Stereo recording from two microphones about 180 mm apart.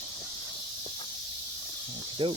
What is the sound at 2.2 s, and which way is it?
Speech, 30° right (ahead or behind).